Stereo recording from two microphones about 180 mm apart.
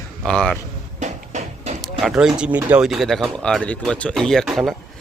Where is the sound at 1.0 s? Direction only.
40° right (ahead or behind).